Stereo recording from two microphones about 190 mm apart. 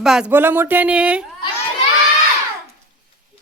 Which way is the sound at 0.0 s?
5° right (ahead or behind).